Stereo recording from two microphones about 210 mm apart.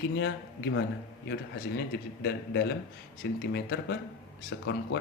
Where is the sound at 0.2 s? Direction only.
60° left (ahead or behind).